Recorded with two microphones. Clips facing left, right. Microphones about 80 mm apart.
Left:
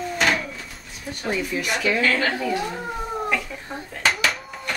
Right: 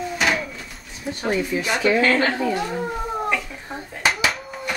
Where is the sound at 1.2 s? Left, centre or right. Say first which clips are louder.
Right 3 dB; centre.